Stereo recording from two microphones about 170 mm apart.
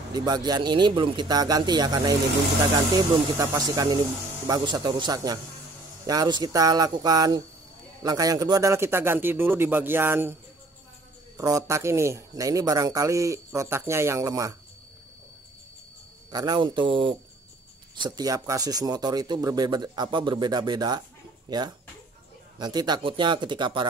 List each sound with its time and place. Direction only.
0.1 s speech: 25° right (ahead or behind)
3.3 s speech: 20° right (ahead or behind)
11.3 s speech: 20° right (ahead or behind)
16.3 s speech: 25° right (ahead or behind)